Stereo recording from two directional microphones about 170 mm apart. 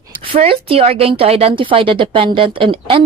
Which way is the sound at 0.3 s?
35° right (ahead or behind).